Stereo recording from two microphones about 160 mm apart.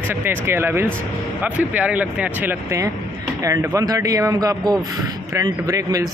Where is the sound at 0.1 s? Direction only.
15° right (ahead or behind).